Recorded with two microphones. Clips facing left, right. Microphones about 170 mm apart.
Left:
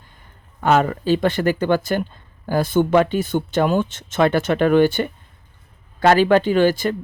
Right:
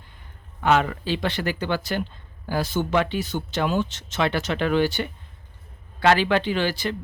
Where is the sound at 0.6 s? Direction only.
45° left (ahead or behind).